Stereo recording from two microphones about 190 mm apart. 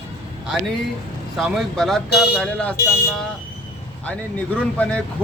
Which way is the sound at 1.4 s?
Centre (ahead or behind).